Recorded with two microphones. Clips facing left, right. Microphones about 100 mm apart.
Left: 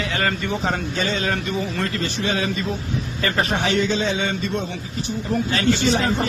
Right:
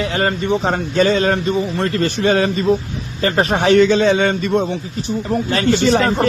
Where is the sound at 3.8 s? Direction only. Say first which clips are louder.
Right 9 dB; 65° right (ahead or behind).